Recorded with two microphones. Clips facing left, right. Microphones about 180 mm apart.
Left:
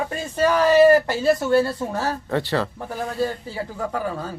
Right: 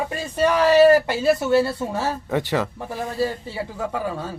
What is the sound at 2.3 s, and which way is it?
Speech, 15° right (ahead or behind).